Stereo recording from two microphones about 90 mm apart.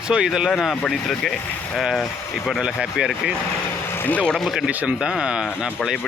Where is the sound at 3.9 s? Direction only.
20° left (ahead or behind).